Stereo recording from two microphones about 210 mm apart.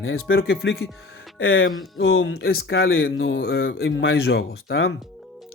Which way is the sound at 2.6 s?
55° left (ahead or behind).